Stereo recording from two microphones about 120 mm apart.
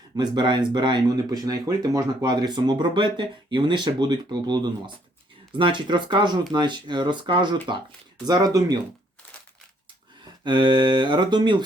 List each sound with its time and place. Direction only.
0.2 s speech: 40° right (ahead or behind)
10.4 s speech: 40° right (ahead or behind)